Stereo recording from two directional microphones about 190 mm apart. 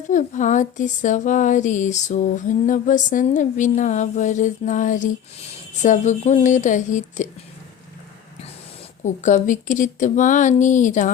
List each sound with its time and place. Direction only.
0.1 s speech: 40° left (ahead or behind)
9.0 s speech: 40° left (ahead or behind)